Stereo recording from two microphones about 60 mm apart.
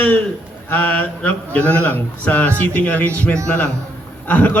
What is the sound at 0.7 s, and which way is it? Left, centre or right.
A man's voice, left.